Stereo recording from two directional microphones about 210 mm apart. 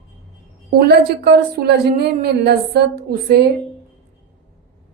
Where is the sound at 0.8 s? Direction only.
50° right (ahead or behind).